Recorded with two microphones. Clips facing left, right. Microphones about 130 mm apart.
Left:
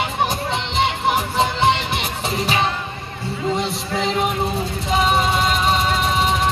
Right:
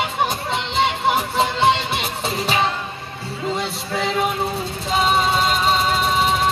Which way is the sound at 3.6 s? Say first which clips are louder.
Left 2 dB; 20° left (ahead or behind).